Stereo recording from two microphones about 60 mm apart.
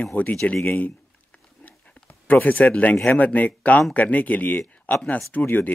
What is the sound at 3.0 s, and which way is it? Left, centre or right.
Speech, left.